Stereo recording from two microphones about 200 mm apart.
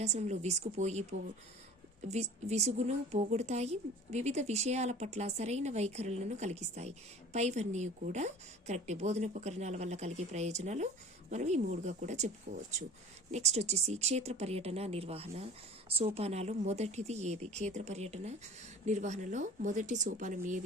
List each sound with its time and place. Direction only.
0.0 s a woman's voice: 35° right (ahead or behind)
2.0 s a woman's voice: 35° right (ahead or behind)
13.3 s a woman's voice: 35° right (ahead or behind)